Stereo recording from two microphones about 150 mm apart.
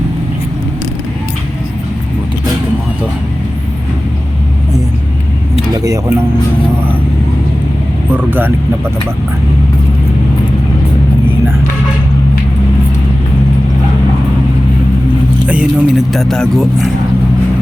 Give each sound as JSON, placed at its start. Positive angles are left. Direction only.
{"t": 5.7, "sound": "speech", "side_deg": -20}
{"t": 8.1, "sound": "speech", "side_deg": -15}
{"t": 15.4, "sound": "speech", "side_deg": -5}